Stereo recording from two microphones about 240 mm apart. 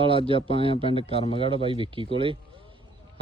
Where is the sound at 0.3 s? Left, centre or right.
Left.